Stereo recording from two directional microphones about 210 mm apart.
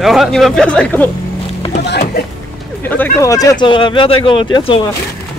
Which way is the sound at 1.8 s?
50° left (ahead or behind).